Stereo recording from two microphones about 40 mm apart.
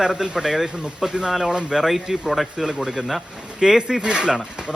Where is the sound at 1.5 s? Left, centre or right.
Right.